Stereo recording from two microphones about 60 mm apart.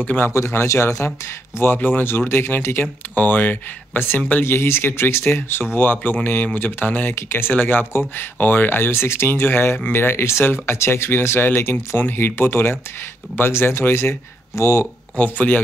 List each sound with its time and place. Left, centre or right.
0.0 s speech: left
0.3 s speech: left
1.6 s speech: left
15.1 s speech: left